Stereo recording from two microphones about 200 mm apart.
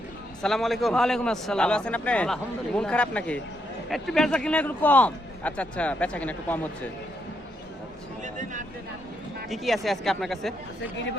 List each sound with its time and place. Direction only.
0.4 s a man's voice: centre (ahead or behind)
8.2 s a sound: 40° right (ahead or behind)
9.5 s a man's voice: centre (ahead or behind)